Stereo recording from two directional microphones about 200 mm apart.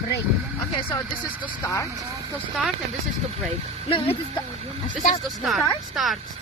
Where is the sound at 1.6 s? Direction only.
15° left (ahead or behind).